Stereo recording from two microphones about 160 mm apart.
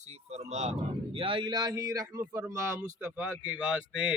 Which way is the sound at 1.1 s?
35° right (ahead or behind).